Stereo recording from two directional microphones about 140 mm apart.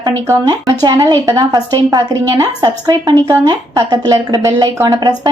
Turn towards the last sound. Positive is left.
turn(degrees=-25)  # may be behind; listen again after turning